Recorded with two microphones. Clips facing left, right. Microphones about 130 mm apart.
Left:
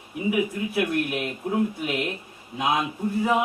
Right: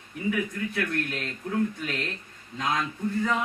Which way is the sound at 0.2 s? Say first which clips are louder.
Left 4 dB; 15° left (ahead or behind).